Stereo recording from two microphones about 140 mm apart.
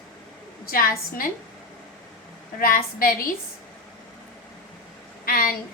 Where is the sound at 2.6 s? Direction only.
90° left.